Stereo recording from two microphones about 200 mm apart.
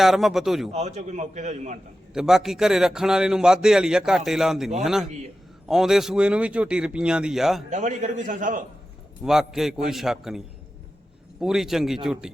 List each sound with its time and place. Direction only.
0.0 s a man's voice: centre (ahead or behind)
0.7 s a man's voice: 35° right (ahead or behind)
2.1 s a man's voice: centre (ahead or behind)
7.7 s a man's voice: 35° right (ahead or behind)
9.2 s a man's voice: centre (ahead or behind)